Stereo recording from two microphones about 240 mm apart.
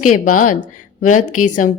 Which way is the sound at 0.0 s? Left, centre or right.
Left.